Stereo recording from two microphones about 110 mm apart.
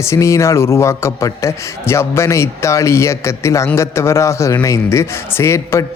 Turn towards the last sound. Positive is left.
turn(degrees=25)  # may be behind; listen again after turning